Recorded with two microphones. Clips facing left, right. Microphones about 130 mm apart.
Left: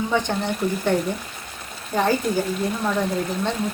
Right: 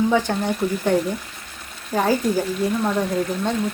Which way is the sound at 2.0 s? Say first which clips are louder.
Right 1 dB; 5° right (ahead or behind).